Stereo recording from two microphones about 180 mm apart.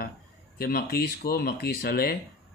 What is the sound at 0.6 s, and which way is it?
Speech, 55° left (ahead or behind).